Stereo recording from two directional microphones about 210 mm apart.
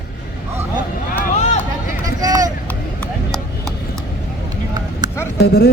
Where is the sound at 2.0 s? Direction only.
15° right (ahead or behind).